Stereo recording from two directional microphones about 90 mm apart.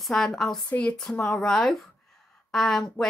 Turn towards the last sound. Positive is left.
turn(degrees=5)  # may be behind; listen again after turning